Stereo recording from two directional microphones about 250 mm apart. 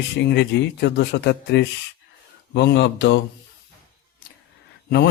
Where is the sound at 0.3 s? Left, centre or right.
Left.